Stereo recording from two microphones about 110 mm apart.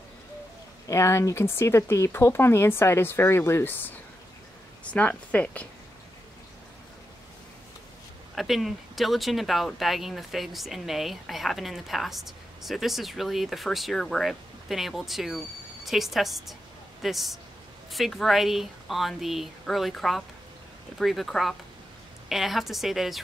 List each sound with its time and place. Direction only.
0.8 s speech: 25° left (ahead or behind)
4.9 s speech: 10° left (ahead or behind)
8.4 s speech: centre (ahead or behind)